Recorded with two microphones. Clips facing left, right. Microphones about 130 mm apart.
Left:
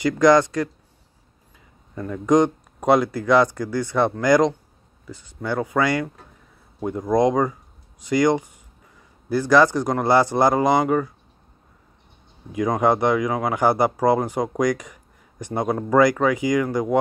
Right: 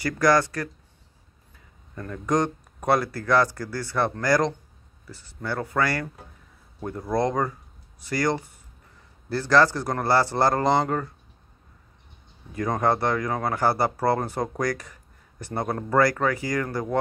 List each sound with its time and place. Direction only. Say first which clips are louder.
0.0 s speech: left 5 dB; 20° left (ahead or behind)
2.0 s speech: left 7 dB; 10° left (ahead or behind)
12.5 s speech: left 4 dB; 15° left (ahead or behind)